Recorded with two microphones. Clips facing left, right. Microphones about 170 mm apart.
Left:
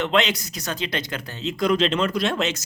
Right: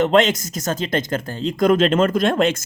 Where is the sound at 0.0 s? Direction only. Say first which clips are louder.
Right 6 dB; 45° right (ahead or behind).